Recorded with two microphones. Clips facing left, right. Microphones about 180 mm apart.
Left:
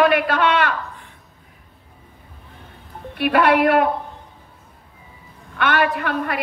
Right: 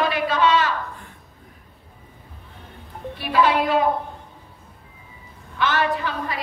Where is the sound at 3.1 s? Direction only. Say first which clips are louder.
Left 3 dB; 65° left (ahead or behind).